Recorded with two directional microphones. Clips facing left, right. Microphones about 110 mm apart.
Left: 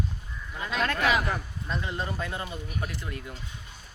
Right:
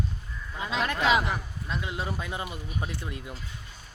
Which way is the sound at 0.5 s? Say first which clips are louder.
Even; 20° right (ahead or behind).